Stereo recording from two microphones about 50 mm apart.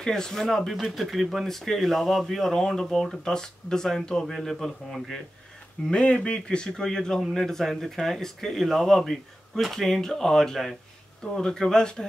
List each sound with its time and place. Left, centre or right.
0.0 s speech: centre
5.9 s speech: centre